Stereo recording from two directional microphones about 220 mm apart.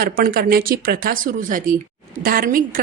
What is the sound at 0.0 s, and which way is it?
A woman's voice, 40° right (ahead or behind).